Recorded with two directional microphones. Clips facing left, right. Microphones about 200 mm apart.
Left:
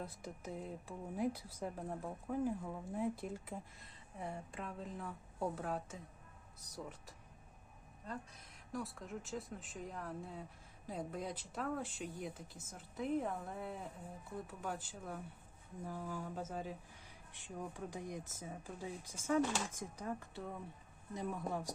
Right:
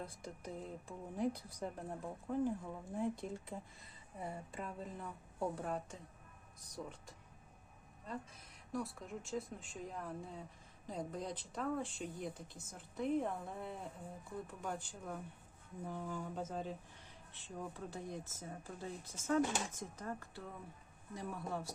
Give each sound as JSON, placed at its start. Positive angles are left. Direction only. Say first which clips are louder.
{"t": 0.0, "sound": "speech", "louder": "left 1 dB", "side_deg": 5}
{"t": 8.0, "sound": "speech", "louder": "right 1 dB", "side_deg": 0}